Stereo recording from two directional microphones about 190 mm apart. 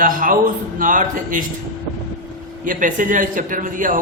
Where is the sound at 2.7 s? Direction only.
45° right (ahead or behind).